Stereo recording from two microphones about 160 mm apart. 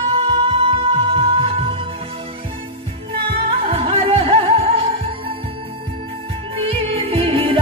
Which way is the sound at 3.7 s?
35° right (ahead or behind).